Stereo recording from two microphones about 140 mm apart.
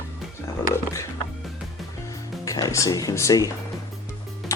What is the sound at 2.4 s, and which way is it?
Speech, 25° left (ahead or behind).